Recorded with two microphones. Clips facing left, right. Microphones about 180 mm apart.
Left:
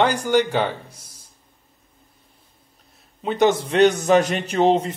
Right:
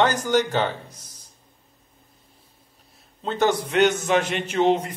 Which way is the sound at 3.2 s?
15° left (ahead or behind).